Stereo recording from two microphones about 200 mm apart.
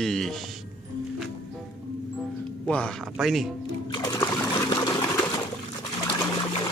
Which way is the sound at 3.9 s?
20° left (ahead or behind).